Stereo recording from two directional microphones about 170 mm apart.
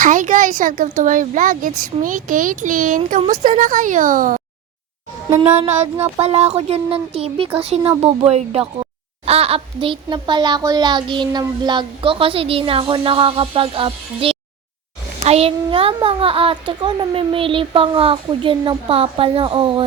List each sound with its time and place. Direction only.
0.0 s speech: 50° right (ahead or behind)
5.5 s a child's voice: 40° right (ahead or behind)